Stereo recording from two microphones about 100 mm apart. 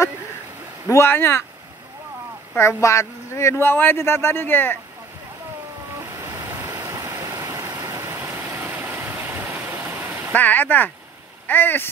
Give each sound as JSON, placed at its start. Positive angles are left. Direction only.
{"t": 0.8, "sound": "speech", "side_deg": 25}
{"t": 2.5, "sound": "speech", "side_deg": 30}
{"t": 6.4, "sound": "vehicle", "side_deg": -25}
{"t": 10.3, "sound": "speech", "side_deg": 15}